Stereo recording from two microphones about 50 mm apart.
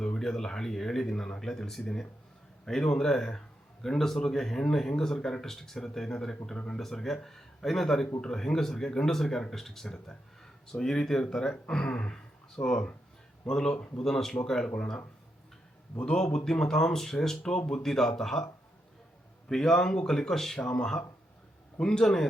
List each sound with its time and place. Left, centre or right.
0.0 s speech: centre
14.0 s speech: centre
14.8 s speech: left
19.5 s speech: centre
20.6 s speech: left